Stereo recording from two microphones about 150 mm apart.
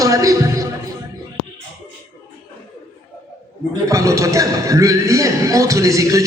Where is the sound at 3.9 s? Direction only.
20° right (ahead or behind).